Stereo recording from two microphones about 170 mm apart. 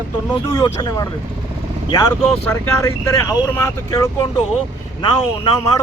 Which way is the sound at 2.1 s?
5° left (ahead or behind).